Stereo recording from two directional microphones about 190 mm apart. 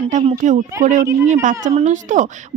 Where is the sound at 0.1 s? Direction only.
40° right (ahead or behind).